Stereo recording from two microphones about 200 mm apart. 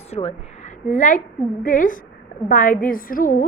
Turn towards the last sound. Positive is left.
turn(degrees=45)  # may be behind; listen again after turning